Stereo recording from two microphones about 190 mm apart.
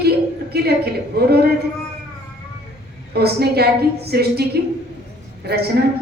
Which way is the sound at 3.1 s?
55° right (ahead or behind).